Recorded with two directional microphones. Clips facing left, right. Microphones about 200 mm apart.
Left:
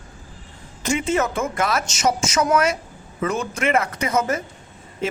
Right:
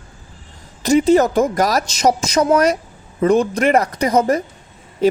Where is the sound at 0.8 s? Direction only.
35° right (ahead or behind).